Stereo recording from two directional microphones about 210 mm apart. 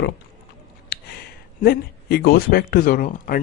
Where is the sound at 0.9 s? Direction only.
50° left (ahead or behind).